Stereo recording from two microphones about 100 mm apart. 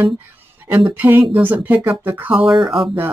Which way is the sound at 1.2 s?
60° right (ahead or behind).